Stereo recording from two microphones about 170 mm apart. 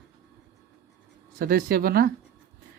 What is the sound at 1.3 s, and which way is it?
Speech, 60° right (ahead or behind).